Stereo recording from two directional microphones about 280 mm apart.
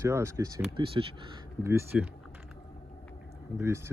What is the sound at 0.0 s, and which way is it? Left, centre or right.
Speech, centre.